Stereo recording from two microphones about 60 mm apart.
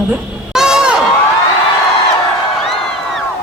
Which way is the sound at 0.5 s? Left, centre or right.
Centre.